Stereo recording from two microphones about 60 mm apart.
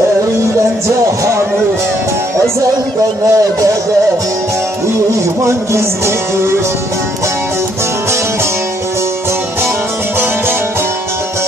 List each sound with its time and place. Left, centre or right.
3.3 s speech: right
5.4 s speech: right